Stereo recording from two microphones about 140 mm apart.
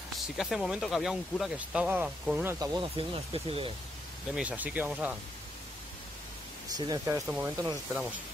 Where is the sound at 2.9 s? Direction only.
45° right (ahead or behind).